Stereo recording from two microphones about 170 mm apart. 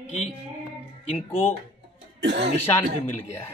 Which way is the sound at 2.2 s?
90° right.